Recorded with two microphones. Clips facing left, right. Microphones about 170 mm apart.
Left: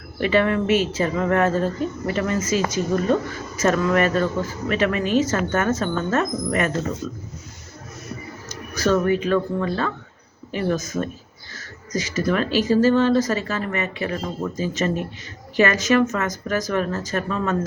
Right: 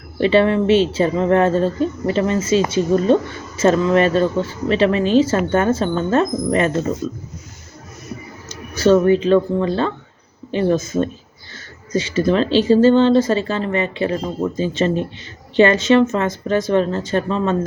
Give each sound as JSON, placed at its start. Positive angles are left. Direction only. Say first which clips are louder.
{"t": 0.2, "sound": "speech", "louder": "right 5 dB", "side_deg": -30}
{"t": 8.4, "sound": "speech", "louder": "right 7 dB", "side_deg": -30}